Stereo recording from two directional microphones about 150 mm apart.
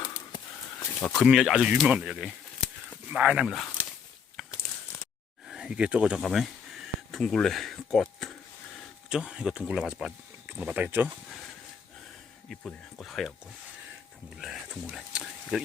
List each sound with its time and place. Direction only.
0.0 s snort: 25° left (ahead or behind)
1.2 s speech: 5° right (ahead or behind)
4.4 s a sound: centre (ahead or behind)
5.5 s speech: 5° right (ahead or behind)
12.5 s speech: 5° left (ahead or behind)
14.3 s a sound: centre (ahead or behind)